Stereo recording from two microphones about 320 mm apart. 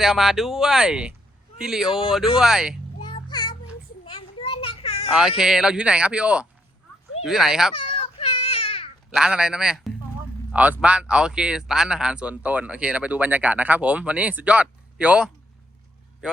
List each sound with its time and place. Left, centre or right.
0.0 s speech: centre
3.0 s child singing: centre
4.0 s children playing: centre
5.4 s speech: centre
7.8 s baby cry: centre
9.1 s speech: centre